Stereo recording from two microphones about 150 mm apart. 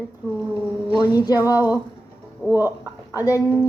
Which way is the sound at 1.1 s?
25° left (ahead or behind).